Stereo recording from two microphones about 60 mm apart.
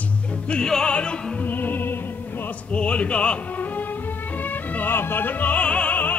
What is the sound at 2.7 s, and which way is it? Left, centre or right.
Music, left.